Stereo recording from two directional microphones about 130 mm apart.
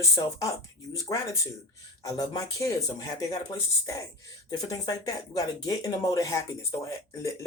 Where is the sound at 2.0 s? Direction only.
25° left (ahead or behind).